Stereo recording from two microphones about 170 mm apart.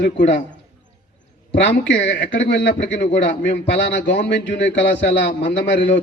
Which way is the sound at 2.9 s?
40° left (ahead or behind).